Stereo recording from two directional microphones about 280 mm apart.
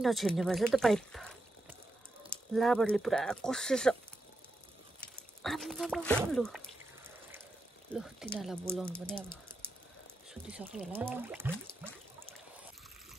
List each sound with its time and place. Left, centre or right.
0.0 s speech: centre
2.3 s speech: centre
5.4 s speech: centre
7.9 s speech: centre